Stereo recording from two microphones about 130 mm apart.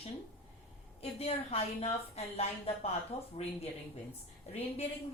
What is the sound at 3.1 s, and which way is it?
Speech, 55° left (ahead or behind).